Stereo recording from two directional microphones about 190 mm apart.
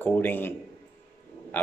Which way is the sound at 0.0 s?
10° left (ahead or behind).